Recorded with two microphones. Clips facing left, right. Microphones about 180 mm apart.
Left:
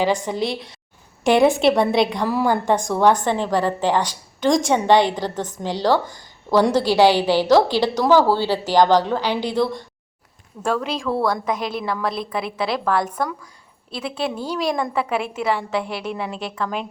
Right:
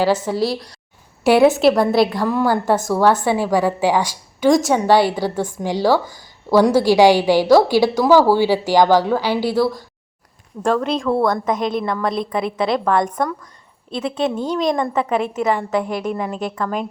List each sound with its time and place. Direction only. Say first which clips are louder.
0.0 s a woman's voice: right 3 dB; 5° right (ahead or behind)
10.7 s a woman's voice: right 4 dB; 5° left (ahead or behind)
16.2 s speech: right 4 dB; 45° right (ahead or behind)